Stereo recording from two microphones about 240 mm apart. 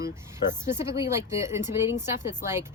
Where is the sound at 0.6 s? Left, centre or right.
Centre.